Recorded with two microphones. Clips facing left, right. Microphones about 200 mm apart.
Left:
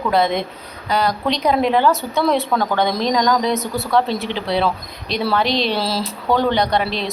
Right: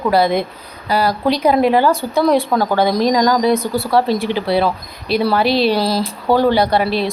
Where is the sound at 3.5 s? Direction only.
30° right (ahead or behind).